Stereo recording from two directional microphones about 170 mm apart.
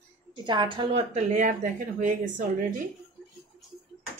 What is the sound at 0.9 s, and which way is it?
Speech, 40° right (ahead or behind).